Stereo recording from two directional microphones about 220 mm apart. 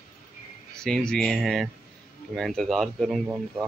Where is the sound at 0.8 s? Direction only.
5° left (ahead or behind).